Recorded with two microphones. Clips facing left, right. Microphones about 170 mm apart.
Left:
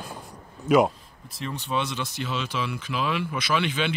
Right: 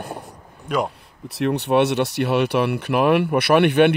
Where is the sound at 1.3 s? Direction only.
70° right (ahead or behind).